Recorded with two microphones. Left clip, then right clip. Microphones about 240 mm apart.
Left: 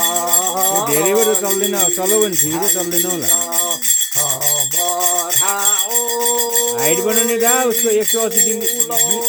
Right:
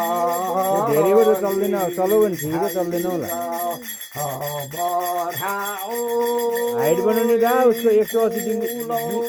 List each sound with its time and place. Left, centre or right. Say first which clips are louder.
0.1 s music: left 2 dB; left
0.9 s music: right 2 dB; left
6.7 s music: left 1 dB; left